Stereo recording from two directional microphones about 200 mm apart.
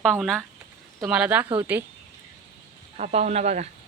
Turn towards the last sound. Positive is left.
turn(degrees=-35)  # may be behind; listen again after turning